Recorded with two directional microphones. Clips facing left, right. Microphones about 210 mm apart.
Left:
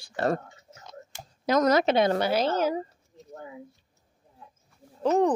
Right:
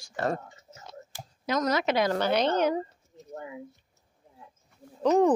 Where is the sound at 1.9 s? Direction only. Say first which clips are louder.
Left 3 dB; 25° left (ahead or behind).